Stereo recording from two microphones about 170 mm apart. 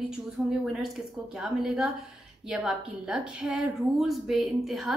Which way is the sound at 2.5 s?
5° right (ahead or behind).